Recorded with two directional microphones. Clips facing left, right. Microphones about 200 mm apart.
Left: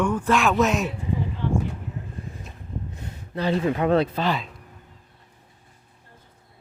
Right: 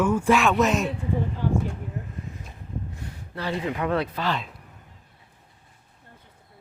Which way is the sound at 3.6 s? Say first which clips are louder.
Left 5 dB; 30° left (ahead or behind).